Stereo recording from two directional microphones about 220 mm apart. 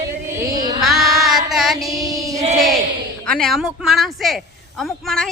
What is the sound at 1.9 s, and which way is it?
Female singing, 15° right (ahead or behind).